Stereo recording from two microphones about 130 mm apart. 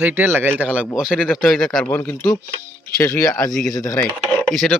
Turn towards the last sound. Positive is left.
turn(degrees=0)  # may be behind; listen again after turning